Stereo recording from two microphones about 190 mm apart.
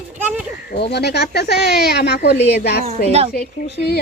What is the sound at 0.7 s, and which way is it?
A woman's voice, 60° left (ahead or behind).